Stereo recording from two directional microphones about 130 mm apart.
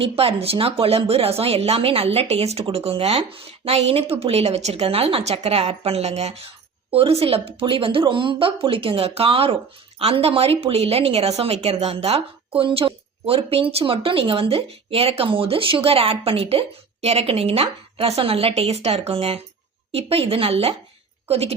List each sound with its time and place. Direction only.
0.0 s a woman's voice: 50° right (ahead or behind)